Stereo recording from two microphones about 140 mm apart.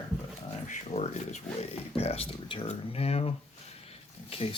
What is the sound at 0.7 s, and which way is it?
Speech, 50° left (ahead or behind).